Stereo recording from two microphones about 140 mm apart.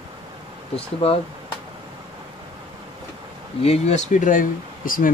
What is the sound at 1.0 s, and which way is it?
Speech, 45° left (ahead or behind).